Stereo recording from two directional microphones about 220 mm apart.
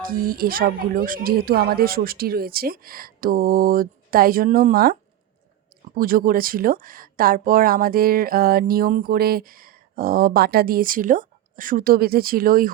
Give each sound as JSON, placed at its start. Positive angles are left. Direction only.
{"t": 0.0, "sound": "speech", "side_deg": -40}
{"t": 6.0, "sound": "speech", "side_deg": -40}